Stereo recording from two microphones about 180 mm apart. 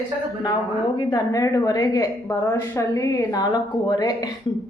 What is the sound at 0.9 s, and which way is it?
A woman's voice, 20° left (ahead or behind).